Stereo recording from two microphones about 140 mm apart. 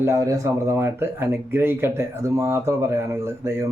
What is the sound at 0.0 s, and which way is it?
Speech, 20° right (ahead or behind).